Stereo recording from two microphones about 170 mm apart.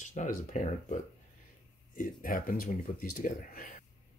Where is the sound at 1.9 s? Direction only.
55° left (ahead or behind).